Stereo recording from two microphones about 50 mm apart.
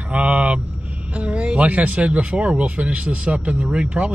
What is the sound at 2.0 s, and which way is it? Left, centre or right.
Speech, right.